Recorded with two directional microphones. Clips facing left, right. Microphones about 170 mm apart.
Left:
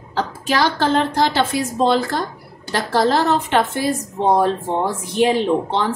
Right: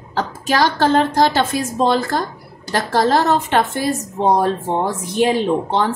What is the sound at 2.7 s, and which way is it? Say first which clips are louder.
Speech: right 1 dB; 40° right (ahead or behind).